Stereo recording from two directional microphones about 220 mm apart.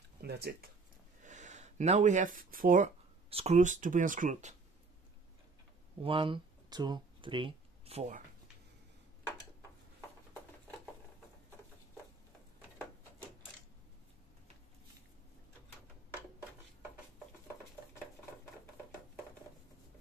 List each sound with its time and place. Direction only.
0.2 s speech: 45° right (ahead or behind)
1.2 s speech: 35° right (ahead or behind)
6.0 s speech: 25° right (ahead or behind)